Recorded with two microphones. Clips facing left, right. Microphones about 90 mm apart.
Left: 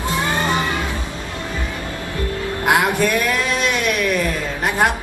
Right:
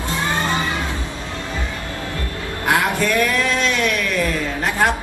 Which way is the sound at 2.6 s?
20° left (ahead or behind).